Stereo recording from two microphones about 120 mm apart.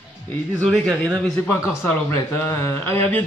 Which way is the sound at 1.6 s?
20° left (ahead or behind).